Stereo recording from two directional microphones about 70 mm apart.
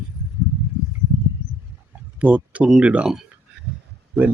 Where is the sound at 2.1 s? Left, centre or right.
Centre.